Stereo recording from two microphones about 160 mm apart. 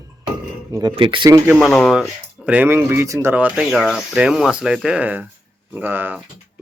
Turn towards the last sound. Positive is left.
turn(degrees=-10)  # may be behind; listen again after turning